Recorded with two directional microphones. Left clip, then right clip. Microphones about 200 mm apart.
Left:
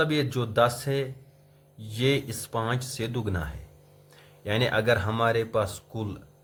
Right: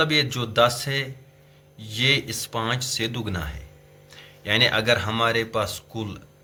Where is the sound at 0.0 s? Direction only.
45° left (ahead or behind).